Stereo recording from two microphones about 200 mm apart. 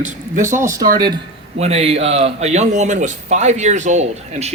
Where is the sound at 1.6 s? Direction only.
30° right (ahead or behind).